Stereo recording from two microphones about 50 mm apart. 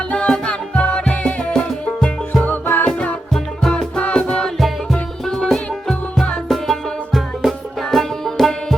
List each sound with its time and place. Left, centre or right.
0.1 s music: centre
2.4 s music: left
3.3 s music: centre
4.5 s music: centre